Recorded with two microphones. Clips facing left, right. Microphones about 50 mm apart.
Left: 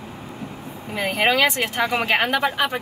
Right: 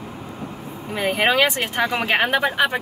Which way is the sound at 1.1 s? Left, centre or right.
Centre.